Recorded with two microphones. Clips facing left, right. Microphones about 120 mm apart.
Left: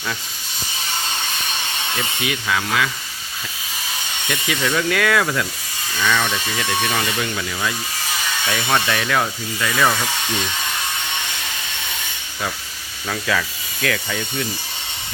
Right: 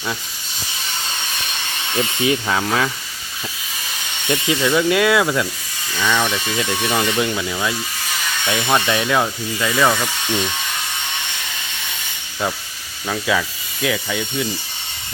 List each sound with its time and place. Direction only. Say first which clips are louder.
2.2 s speech: right 4 dB; 30° right (ahead or behind)
4.3 s speech: right 4 dB; 20° right (ahead or behind)
13.1 s speech: right 2 dB; 15° right (ahead or behind)